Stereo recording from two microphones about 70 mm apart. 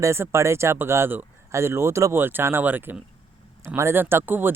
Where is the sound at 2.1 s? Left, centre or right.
Right.